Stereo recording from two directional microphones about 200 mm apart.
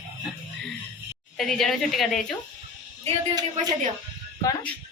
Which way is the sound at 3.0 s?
30° right (ahead or behind).